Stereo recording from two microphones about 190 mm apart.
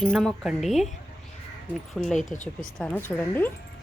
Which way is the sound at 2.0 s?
Centre (ahead or behind).